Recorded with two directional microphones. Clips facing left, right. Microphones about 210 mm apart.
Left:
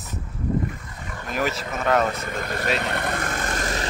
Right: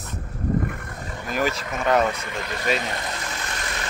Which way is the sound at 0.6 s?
60° right (ahead or behind).